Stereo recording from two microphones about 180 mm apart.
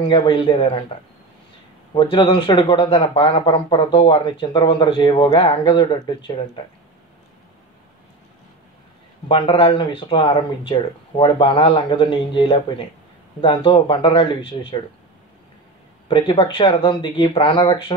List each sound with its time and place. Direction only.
0.1 s a man's voice: 25° left (ahead or behind)
2.0 s a man's voice: 25° left (ahead or behind)
9.3 s a man's voice: 30° left (ahead or behind)
16.1 s a man's voice: 25° left (ahead or behind)